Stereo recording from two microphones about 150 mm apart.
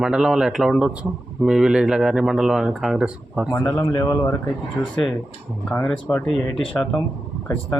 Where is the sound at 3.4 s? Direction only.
20° left (ahead or behind).